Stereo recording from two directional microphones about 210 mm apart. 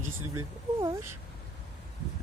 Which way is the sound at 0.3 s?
15° right (ahead or behind).